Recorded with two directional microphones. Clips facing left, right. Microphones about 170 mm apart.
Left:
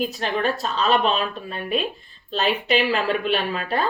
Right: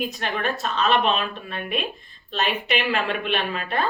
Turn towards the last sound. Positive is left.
turn(degrees=35)  # may be behind; listen again after turning